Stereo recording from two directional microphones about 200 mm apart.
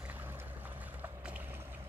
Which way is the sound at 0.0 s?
10° right (ahead or behind).